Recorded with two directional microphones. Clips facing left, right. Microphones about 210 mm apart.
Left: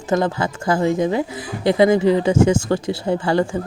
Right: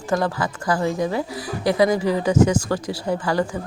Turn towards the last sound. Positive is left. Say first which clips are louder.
# left 3 dB
turn(degrees=25)  # may be behind; listen again after turning